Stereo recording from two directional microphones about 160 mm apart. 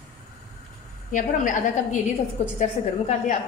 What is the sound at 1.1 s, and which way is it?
A woman's voice, 55° left (ahead or behind).